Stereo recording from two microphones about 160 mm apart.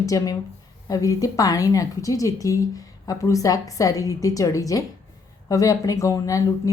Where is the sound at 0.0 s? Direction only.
20° left (ahead or behind).